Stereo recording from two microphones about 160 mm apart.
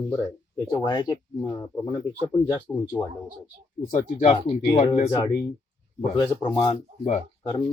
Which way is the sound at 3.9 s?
50° left (ahead or behind).